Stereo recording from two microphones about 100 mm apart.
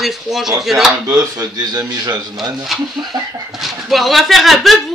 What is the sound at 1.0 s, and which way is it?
Speech, 35° right (ahead or behind).